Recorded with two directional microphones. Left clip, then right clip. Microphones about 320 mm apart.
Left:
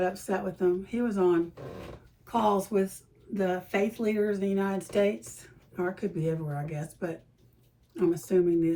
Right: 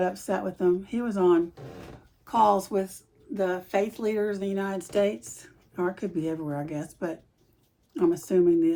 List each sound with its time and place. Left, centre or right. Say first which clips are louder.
0.0 s a woman's voice: right 2 dB; right